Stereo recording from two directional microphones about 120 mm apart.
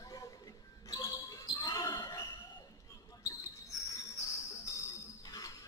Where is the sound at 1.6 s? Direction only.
35° left (ahead or behind).